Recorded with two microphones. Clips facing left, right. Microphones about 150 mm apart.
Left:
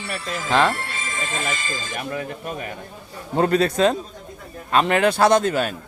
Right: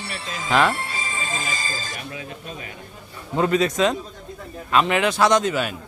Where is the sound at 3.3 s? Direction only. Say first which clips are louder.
Left 1 dB; 40° left (ahead or behind).